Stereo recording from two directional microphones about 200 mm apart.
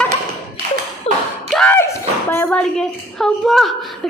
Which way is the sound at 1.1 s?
30° left (ahead or behind).